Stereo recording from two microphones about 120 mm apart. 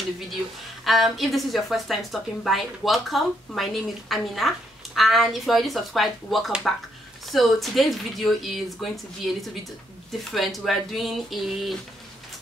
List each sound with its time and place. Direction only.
0.8 s a woman's voice: centre (ahead or behind)